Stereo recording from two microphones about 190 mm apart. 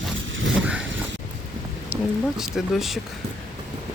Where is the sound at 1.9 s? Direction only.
10° right (ahead or behind).